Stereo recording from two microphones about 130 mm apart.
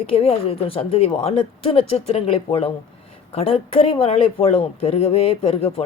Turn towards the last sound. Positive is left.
turn(degrees=50)  # may be behind; listen again after turning